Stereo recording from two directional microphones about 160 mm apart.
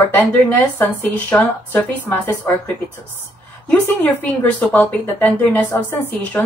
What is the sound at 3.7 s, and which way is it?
A woman's voice, 10° left (ahead or behind).